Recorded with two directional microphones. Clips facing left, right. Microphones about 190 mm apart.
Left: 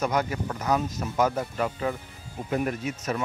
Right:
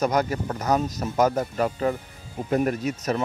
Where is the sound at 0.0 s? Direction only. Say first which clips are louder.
Right 3 dB; 40° right (ahead or behind).